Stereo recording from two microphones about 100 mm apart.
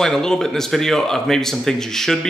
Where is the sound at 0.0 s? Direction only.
5° left (ahead or behind).